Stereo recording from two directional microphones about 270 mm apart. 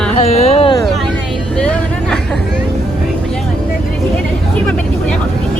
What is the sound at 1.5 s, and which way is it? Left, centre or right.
Vehicle, centre.